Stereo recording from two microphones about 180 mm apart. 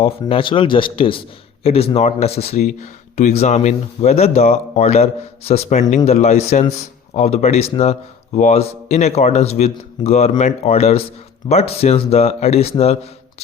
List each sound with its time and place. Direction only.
0.0 s speech: 30° left (ahead or behind)